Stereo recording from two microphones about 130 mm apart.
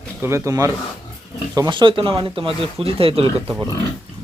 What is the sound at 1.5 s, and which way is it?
Speech, 35° right (ahead or behind).